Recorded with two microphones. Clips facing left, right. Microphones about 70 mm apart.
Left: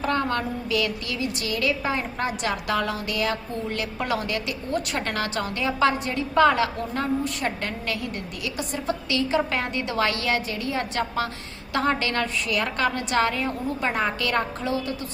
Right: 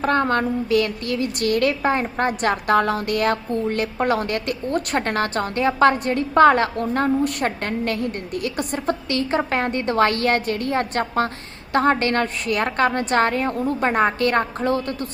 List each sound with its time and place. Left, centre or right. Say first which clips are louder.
0.0 s a woman's voice: right 5 dB; right